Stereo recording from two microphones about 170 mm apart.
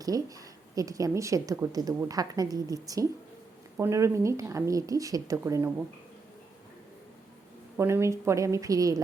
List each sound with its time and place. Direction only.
0.0 s a woman's voice: 20° right (ahead or behind)
7.8 s a woman's voice: 15° right (ahead or behind)